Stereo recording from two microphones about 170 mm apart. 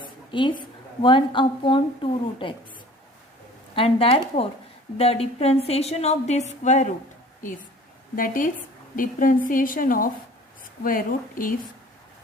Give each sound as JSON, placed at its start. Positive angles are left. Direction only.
{"t": 0.3, "sound": "speech", "side_deg": 30}
{"t": 3.8, "sound": "speech", "side_deg": 30}
{"t": 8.1, "sound": "a woman's voice", "side_deg": 55}